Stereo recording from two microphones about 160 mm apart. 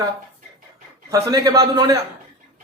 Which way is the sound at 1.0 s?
20° right (ahead or behind).